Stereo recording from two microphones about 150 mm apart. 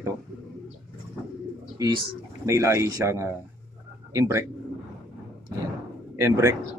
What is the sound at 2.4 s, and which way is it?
Speech, 20° right (ahead or behind).